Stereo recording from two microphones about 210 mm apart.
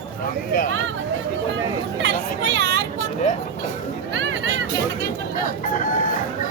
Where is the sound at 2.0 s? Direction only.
55° right (ahead or behind).